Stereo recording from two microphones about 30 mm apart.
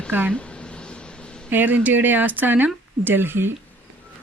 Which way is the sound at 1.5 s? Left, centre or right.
Right.